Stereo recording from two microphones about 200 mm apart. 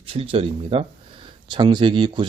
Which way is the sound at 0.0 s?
25° right (ahead or behind).